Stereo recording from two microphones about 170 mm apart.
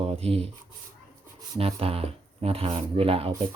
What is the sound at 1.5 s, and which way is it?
Speech, 35° right (ahead or behind).